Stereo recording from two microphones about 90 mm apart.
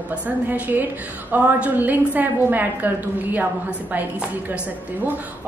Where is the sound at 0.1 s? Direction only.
20° right (ahead or behind).